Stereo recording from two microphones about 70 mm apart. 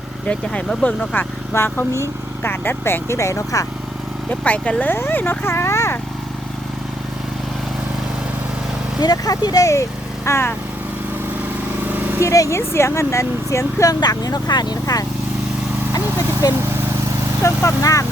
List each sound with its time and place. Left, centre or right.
0.3 s speech: centre
1.5 s speech: left
4.3 s speech: centre
4.8 s speech: left
9.0 s speech: left
10.2 s speech: left
12.2 s speech: left
14.0 s speech: left
15.9 s a sound: left
17.4 s speech: left